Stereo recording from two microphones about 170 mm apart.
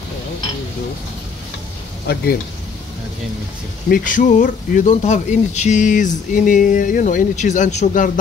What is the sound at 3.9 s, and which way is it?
Speech, 50° left (ahead or behind).